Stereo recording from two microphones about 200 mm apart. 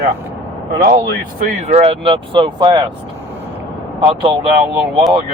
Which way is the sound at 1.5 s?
35° right (ahead or behind).